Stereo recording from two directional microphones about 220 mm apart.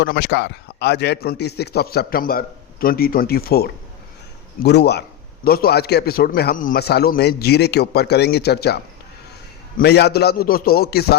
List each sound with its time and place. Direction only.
0.0 s a man's voice: 50° left (ahead or behind)